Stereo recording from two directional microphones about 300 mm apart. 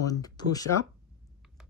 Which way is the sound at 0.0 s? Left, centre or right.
Centre.